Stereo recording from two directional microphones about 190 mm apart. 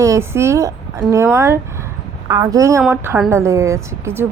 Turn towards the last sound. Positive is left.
turn(degrees=-15)  # may be behind; listen again after turning